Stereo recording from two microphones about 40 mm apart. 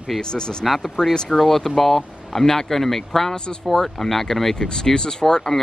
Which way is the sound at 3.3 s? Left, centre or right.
Centre.